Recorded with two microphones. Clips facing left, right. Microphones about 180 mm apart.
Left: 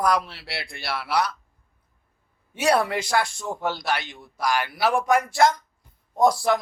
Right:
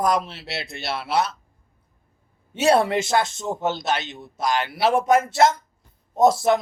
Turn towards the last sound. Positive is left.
turn(degrees=-25)  # may be behind; listen again after turning